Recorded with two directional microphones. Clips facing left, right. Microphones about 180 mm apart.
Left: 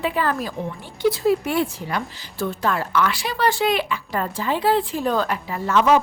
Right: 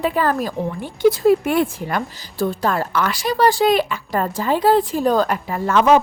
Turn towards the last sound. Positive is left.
turn(degrees=-50)  # may be behind; listen again after turning